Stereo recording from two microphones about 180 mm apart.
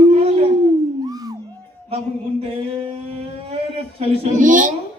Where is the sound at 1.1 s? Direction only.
20° right (ahead or behind).